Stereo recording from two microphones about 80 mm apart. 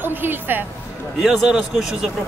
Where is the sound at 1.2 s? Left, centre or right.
Centre.